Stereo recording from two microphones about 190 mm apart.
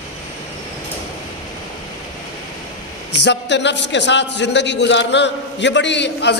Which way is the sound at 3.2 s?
65° left (ahead or behind).